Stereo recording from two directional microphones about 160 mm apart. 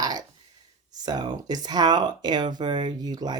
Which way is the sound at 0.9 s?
25° right (ahead or behind).